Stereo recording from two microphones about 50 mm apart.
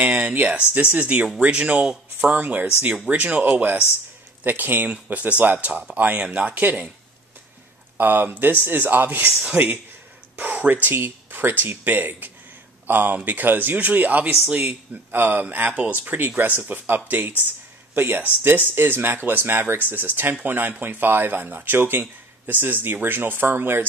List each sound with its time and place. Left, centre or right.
0.0 s speech: right
8.0 s speech: right
9.6 s speech: right
10.9 s speech: right
14.6 s speech: right